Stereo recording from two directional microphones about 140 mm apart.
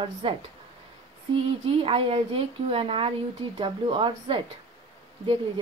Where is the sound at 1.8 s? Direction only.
40° right (ahead or behind).